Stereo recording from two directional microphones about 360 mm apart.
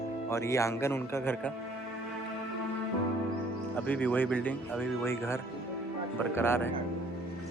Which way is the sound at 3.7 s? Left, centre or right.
Centre.